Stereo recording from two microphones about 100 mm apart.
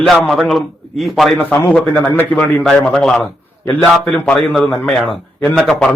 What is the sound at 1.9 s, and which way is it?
A man's voice, 20° left (ahead or behind).